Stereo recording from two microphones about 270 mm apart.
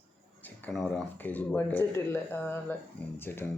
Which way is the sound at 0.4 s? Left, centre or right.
Centre.